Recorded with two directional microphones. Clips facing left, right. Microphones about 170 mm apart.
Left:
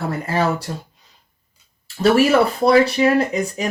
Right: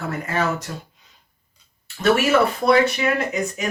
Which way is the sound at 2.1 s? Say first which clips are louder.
Left 3 dB; 35° left (ahead or behind).